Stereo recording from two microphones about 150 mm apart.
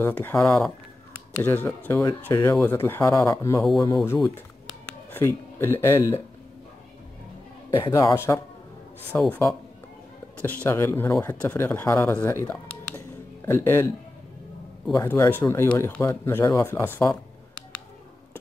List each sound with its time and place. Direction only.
0.0 s speech: 15° left (ahead or behind)
4.6 s a sound: 10° left (ahead or behind)
5.2 s speech: 15° left (ahead or behind)
7.9 s speech: 20° left (ahead or behind)
10.4 s speech: 10° left (ahead or behind)